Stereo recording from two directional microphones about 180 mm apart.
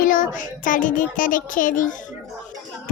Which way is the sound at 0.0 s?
50° left (ahead or behind).